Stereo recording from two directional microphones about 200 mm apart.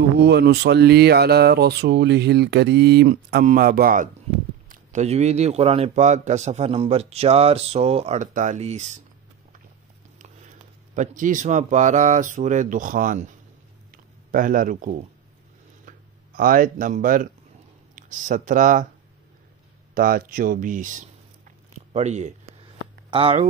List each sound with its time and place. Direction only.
0.2 s a man's voice: 55° right (ahead or behind); by 8.9 s 35° right (ahead or behind)
11.0 s a man's voice: 40° right (ahead or behind)
14.3 s speech: 40° right (ahead or behind)
16.3 s speech: 45° right (ahead or behind)
19.9 s speech: 45° right (ahead or behind); by 23.4 s 25° right (ahead or behind)